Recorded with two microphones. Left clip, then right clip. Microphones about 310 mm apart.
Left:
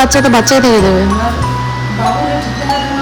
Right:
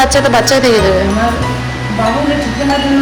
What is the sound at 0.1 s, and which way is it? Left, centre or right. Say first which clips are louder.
Speech: even; left.